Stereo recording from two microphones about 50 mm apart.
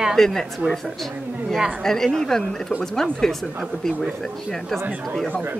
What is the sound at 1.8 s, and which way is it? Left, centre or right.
Speech, centre.